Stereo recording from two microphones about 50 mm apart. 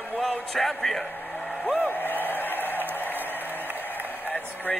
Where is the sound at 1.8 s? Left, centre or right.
Left.